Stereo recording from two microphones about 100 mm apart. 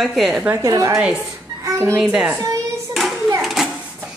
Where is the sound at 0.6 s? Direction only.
35° right (ahead or behind).